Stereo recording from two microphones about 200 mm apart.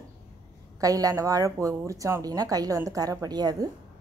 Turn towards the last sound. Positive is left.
turn(degrees=-20)  # may be behind; listen again after turning